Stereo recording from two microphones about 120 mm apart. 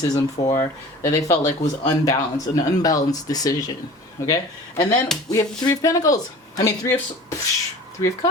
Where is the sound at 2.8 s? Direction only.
30° left (ahead or behind).